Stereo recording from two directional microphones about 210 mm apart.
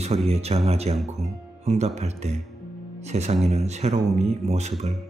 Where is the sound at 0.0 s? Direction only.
30° right (ahead or behind).